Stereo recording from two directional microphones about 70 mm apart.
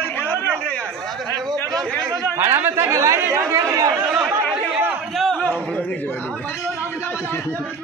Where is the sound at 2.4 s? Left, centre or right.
Right.